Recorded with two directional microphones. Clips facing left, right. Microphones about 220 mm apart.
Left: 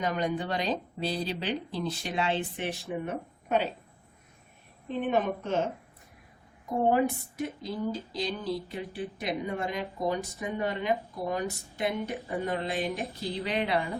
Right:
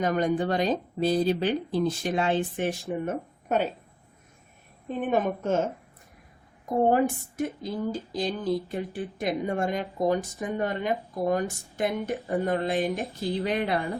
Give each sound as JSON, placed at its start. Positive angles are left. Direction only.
{"t": 0.0, "sound": "speech", "side_deg": -45}
{"t": 4.9, "sound": "speech", "side_deg": -45}
{"t": 6.9, "sound": "speech", "side_deg": -50}